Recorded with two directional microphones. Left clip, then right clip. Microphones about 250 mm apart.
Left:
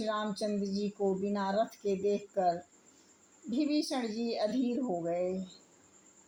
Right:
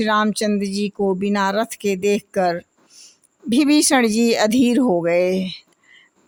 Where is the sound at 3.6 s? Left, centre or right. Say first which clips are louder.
Right 17 dB; right.